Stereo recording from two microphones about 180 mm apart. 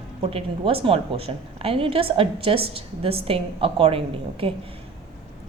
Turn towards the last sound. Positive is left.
turn(degrees=-30)  # may be behind; listen again after turning